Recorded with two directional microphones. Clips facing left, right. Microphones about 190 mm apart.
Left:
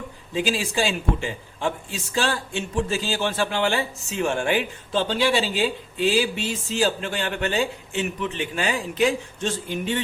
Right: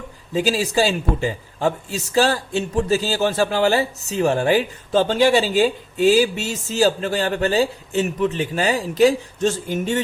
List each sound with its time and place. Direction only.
0.3 s a man's voice: 40° right (ahead or behind)